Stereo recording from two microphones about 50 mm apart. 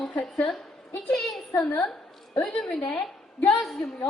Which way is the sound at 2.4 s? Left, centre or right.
Centre.